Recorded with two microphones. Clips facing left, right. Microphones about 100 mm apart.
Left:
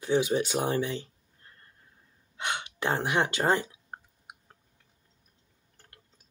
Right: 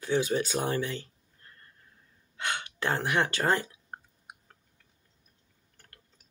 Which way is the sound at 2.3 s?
20° left (ahead or behind).